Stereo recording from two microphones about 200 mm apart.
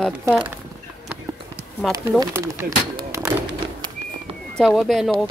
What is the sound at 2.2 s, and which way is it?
Speech, 15° right (ahead or behind).